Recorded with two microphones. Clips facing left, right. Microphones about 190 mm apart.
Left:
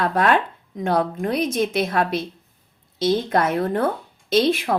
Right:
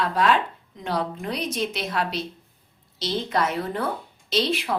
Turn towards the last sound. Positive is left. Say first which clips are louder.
# left 6 dB
turn(degrees=50)  # may be behind; listen again after turning